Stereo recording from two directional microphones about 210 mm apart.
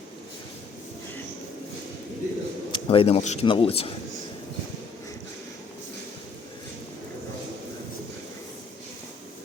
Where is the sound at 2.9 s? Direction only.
25° left (ahead or behind).